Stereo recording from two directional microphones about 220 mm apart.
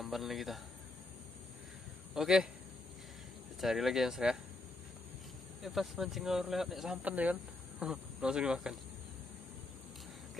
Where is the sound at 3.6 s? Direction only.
Centre (ahead or behind).